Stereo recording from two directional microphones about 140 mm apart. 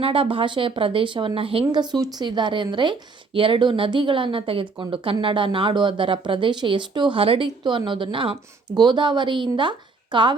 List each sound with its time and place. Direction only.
0.0 s speech: 40° right (ahead or behind)